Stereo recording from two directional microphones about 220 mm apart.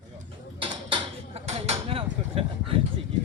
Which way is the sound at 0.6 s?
25° right (ahead or behind).